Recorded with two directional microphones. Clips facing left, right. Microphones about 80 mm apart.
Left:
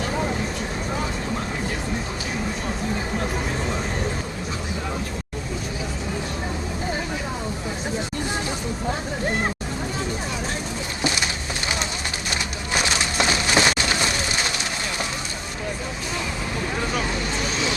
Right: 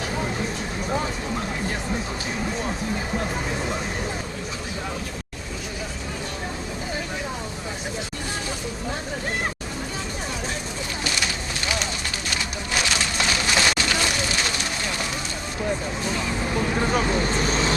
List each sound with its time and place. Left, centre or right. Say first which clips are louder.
12.3 s music: left 1 dB; left
16.9 s vehicle: right 3 dB; right